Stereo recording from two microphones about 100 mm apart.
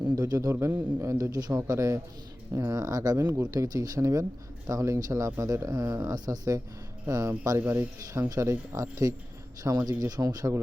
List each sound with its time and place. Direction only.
0.0 s speech: 35° right (ahead or behind)
0.5 s a man's voice: 20° right (ahead or behind)
1.0 s speech: 35° right (ahead or behind)